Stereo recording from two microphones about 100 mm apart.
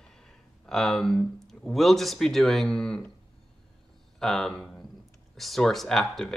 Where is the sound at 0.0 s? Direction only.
5° left (ahead or behind).